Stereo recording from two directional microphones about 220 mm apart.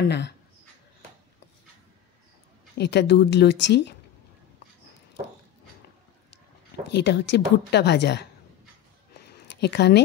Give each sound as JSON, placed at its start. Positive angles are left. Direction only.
{"t": 2.8, "sound": "a woman's voice", "side_deg": 50}
{"t": 6.9, "sound": "a woman's voice", "side_deg": 50}
{"t": 9.2, "sound": "a sound", "side_deg": 50}